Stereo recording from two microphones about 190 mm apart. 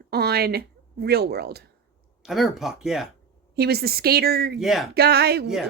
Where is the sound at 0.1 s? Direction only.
55° right (ahead or behind).